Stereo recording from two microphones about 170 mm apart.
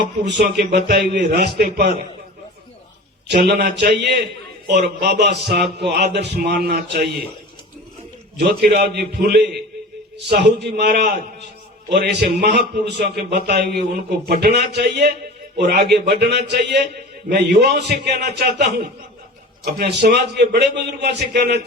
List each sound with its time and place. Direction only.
0.0 s a man's voice: 75° right (ahead or behind)
3.3 s a man's voice: 75° right (ahead or behind)
8.4 s a man's voice: 70° right (ahead or behind)
10.2 s a man's voice: 85° right
19.8 s a man's voice: 70° right (ahead or behind)